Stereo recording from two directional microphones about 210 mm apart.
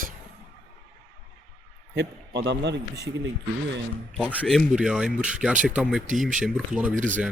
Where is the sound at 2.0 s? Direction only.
55° right (ahead or behind).